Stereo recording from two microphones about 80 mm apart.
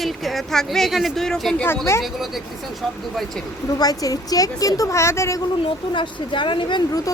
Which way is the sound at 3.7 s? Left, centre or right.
Left.